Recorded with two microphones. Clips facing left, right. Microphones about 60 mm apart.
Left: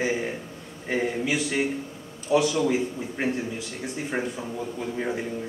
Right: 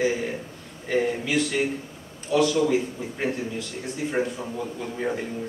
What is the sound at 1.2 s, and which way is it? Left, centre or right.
A man's voice, centre.